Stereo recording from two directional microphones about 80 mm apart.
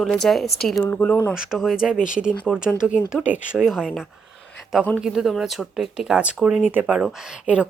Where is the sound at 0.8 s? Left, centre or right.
Left.